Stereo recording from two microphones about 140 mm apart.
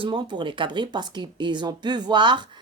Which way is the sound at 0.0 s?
30° right (ahead or behind).